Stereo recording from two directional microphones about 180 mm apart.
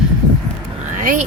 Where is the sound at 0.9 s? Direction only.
45° right (ahead or behind).